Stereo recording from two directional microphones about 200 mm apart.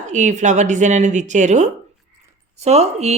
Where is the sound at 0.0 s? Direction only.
35° right (ahead or behind).